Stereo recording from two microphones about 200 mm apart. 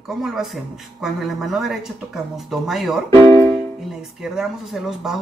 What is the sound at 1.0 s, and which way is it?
Speech, centre (ahead or behind).